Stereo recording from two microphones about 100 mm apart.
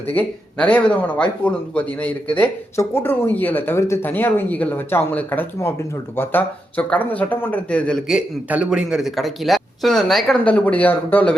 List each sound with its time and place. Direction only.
0.1 s speech: 15° left (ahead or behind)
8.4 s speech: 10° right (ahead or behind)
10.4 s speech: 15° left (ahead or behind)